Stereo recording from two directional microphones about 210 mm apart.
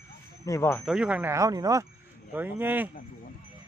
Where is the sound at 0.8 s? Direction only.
5° right (ahead or behind).